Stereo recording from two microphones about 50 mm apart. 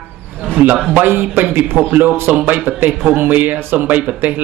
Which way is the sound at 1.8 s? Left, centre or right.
Right.